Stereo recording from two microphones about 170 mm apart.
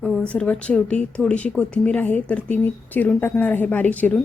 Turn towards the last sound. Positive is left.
turn(degrees=10)  # may be behind; listen again after turning